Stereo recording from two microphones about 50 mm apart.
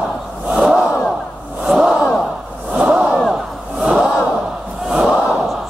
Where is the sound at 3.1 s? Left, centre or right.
Centre.